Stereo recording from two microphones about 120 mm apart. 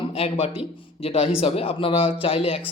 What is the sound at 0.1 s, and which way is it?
A man's voice, 55° left (ahead or behind).